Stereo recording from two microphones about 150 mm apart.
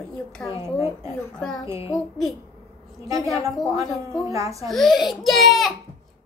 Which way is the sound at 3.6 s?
20° right (ahead or behind).